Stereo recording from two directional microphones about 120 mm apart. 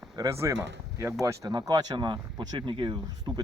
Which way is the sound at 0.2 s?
25° right (ahead or behind).